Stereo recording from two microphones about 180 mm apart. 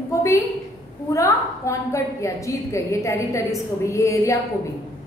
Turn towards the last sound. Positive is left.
turn(degrees=15)  # may be behind; listen again after turning